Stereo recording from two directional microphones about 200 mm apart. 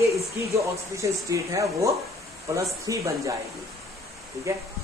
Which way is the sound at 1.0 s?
15° right (ahead or behind).